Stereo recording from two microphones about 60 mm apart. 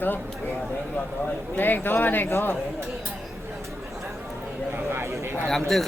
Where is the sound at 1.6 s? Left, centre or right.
Left.